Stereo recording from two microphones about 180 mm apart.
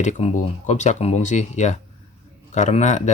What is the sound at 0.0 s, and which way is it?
Speech, 40° left (ahead or behind).